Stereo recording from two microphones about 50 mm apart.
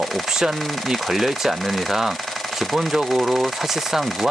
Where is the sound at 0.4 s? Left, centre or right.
Centre.